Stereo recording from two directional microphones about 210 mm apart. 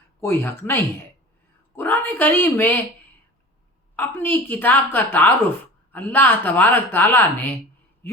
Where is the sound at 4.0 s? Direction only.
10° left (ahead or behind).